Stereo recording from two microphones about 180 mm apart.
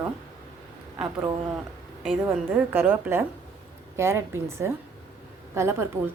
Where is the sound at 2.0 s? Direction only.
5° right (ahead or behind).